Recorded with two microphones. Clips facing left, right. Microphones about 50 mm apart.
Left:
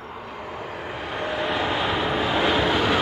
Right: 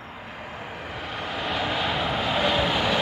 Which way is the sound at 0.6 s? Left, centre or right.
Centre.